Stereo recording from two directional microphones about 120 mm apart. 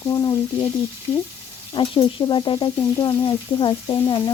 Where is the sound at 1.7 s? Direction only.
45° left (ahead or behind).